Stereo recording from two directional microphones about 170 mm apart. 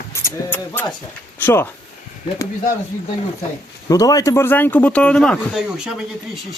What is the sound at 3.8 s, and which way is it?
Speech, 20° left (ahead or behind).